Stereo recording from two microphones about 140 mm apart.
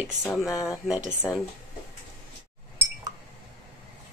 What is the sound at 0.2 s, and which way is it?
Speech, 5° right (ahead or behind).